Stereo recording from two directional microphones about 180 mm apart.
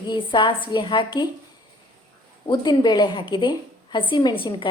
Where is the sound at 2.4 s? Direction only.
25° left (ahead or behind).